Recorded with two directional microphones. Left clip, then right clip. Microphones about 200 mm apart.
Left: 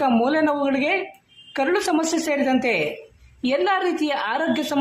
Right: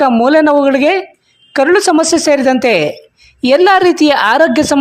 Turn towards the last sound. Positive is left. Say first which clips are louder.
# right 13 dB
turn(degrees=-45)  # may be behind; listen again after turning